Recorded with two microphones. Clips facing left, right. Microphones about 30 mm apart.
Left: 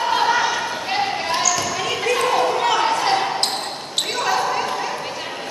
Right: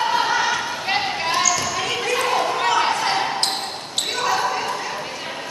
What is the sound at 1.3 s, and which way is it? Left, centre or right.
Basketball bounce, centre.